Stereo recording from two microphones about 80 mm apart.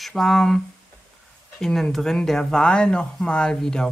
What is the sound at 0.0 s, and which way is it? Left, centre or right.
Speech, centre.